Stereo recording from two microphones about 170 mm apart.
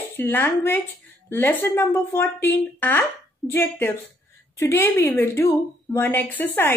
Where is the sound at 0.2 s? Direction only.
10° left (ahead or behind).